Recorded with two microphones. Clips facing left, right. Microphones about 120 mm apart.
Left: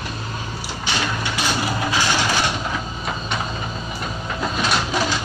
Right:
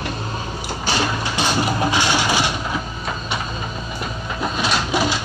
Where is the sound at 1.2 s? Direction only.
25° right (ahead or behind).